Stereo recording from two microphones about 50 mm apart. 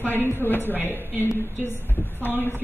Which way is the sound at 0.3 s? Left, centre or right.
Left.